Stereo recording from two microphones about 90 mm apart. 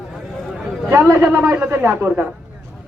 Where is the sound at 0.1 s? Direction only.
Centre (ahead or behind).